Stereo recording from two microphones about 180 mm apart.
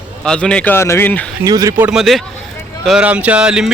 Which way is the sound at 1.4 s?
20° right (ahead or behind).